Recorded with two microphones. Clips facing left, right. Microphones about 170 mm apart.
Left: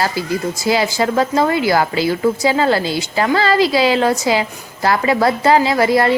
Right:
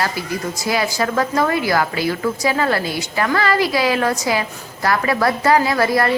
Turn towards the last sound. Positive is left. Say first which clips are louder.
# left 3 dB
turn(degrees=25)  # may be behind; listen again after turning